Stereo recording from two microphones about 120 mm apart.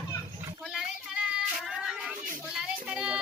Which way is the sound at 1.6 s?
5° right (ahead or behind).